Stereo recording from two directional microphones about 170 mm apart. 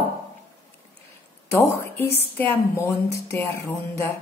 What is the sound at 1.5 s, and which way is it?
A woman's voice, 15° left (ahead or behind).